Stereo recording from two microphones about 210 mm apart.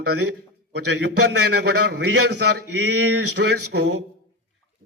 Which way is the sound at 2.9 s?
90° right.